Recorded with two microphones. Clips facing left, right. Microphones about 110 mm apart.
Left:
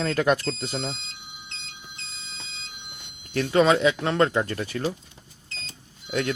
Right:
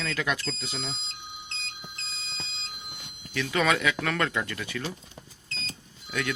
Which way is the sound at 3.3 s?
45° left (ahead or behind).